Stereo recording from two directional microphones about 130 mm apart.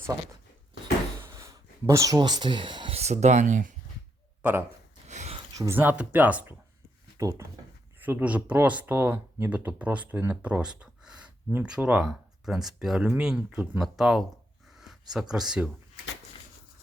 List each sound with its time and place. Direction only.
1.2 s a sound: 20° right (ahead or behind); by 3.0 s 40° right (ahead or behind)
3.0 s speech: 60° right (ahead or behind)
4.4 s speech: 10° right (ahead or behind)
5.0 s a sound: 60° right (ahead or behind)
5.5 s speech: 20° right (ahead or behind)
7.2 s speech: 25° right (ahead or behind)
8.0 s speech: 10° right (ahead or behind)